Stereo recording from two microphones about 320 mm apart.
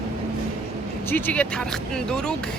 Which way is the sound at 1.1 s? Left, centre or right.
Centre.